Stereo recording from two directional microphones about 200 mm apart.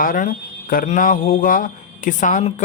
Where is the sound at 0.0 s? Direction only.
45° left (ahead or behind).